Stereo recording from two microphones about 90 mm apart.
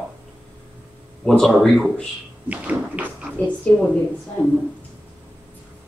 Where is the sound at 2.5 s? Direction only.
15° right (ahead or behind).